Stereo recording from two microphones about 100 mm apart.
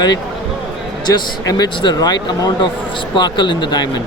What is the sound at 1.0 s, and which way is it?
Speech, 45° left (ahead or behind).